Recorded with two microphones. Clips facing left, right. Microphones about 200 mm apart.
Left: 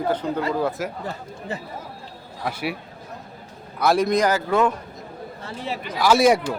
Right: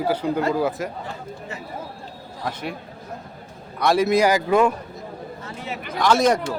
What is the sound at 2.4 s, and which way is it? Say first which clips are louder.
Speech: left 2 dB; 10° left (ahead or behind).